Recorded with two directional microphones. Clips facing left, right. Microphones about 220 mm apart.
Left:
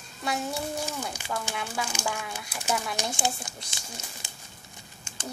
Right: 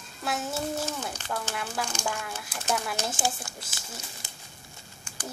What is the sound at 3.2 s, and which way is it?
Speech, 20° left (ahead or behind).